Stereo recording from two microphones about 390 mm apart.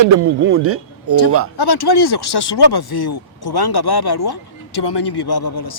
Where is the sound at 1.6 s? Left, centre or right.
Left.